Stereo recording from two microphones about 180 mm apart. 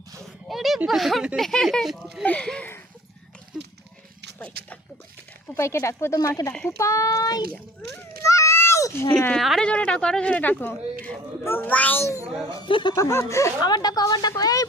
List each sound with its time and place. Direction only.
0.4 s a child's voice: centre (ahead or behind)
5.5 s a child's voice: 15° left (ahead or behind)
6.5 s a child's voice: 5° left (ahead or behind)
6.7 s a woman's voice: 15° left (ahead or behind)